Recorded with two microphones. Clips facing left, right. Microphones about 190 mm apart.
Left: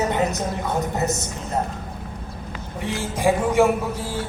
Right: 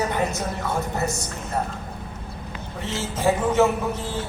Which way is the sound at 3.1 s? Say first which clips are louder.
Left 1 dB; 15° left (ahead or behind).